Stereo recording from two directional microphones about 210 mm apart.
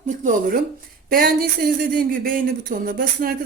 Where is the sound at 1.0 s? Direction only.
45° right (ahead or behind).